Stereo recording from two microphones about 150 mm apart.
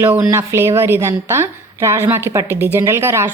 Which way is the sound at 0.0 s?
20° right (ahead or behind).